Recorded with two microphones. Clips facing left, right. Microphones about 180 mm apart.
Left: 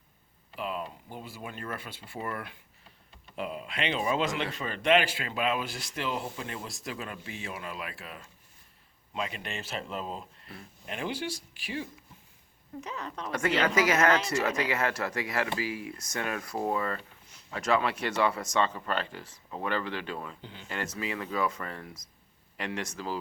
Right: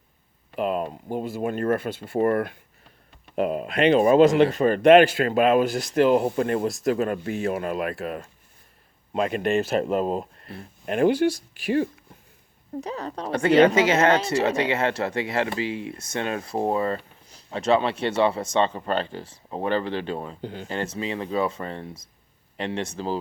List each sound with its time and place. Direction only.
0.5 s speech: 50° right (ahead or behind)
12.7 s a woman's voice: 35° right (ahead or behind)
20.4 s speech: 50° right (ahead or behind)
20.7 s speech: 30° right (ahead or behind)